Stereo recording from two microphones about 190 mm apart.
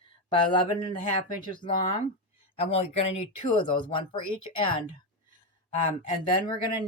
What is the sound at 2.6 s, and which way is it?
Speech, 30° left (ahead or behind).